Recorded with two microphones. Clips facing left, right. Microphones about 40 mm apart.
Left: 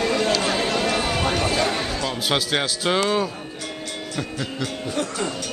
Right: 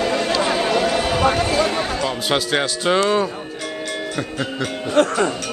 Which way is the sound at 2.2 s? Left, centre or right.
Centre.